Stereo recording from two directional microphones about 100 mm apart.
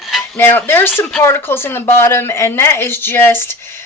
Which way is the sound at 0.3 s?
20° left (ahead or behind).